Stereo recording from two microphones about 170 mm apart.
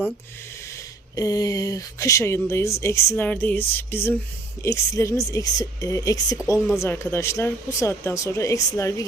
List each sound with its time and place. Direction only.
1.1 s speech: 20° left (ahead or behind)